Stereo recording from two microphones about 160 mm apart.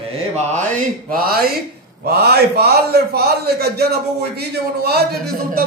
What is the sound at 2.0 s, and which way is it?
A man's voice, 85° right.